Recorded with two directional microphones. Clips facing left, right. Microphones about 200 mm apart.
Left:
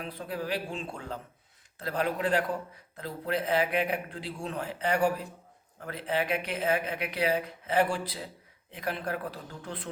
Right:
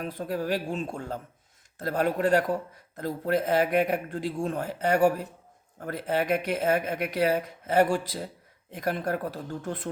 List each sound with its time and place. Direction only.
0.0 s speech: 45° right (ahead or behind)